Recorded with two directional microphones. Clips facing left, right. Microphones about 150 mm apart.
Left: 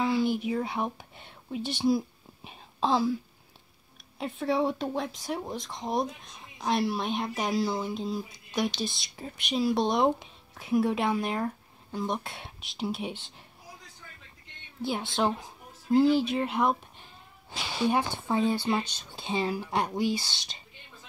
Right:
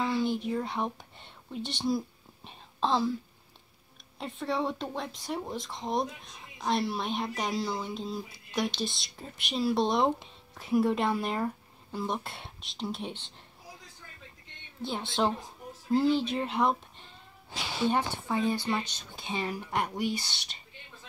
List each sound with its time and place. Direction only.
0.0 s speech: 5° left (ahead or behind)
4.2 s speech: 5° left (ahead or behind)
14.8 s speech: 5° left (ahead or behind)
17.8 s speech: 15° left (ahead or behind); by 20.2 s 30° left (ahead or behind)